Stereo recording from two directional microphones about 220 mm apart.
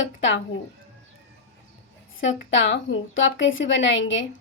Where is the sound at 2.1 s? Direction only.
60° left (ahead or behind).